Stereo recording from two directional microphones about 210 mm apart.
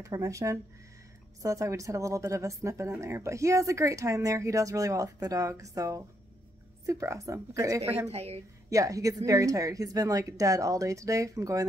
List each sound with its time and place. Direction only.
0.0 s speech: 15° right (ahead or behind)
8.1 s a woman's voice: 30° right (ahead or behind)
8.6 s speech: 15° right (ahead or behind)